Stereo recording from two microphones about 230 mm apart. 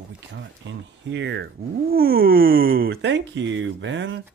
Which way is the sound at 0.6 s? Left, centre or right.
Right.